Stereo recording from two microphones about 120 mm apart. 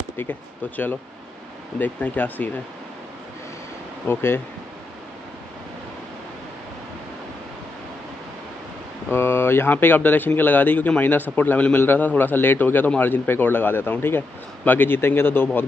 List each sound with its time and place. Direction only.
0.2 s speech: 15° left (ahead or behind)
4.1 s speech: 20° left (ahead or behind)
9.1 s speech: 20° left (ahead or behind)